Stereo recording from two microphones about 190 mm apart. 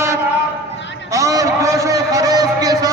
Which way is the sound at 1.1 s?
15° right (ahead or behind).